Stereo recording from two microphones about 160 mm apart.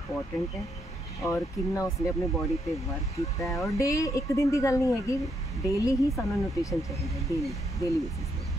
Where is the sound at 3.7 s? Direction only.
20° left (ahead or behind).